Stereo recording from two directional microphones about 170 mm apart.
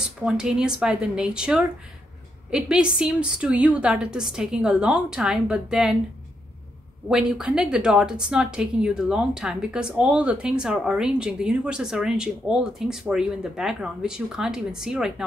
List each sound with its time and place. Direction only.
0.0 s a woman's voice: 5° right (ahead or behind)
7.1 s a woman's voice: 5° right (ahead or behind)